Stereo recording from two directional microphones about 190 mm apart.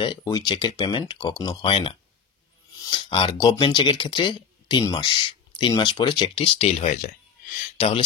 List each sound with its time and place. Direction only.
0.0 s speech: 20° left (ahead or behind)
2.7 s a sound: 20° left (ahead or behind)
3.1 s speech: 30° left (ahead or behind)
3.3 s speech: 20° left (ahead or behind)